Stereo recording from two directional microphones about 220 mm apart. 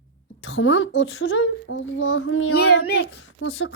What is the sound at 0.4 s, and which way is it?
Speech, 60° left (ahead or behind).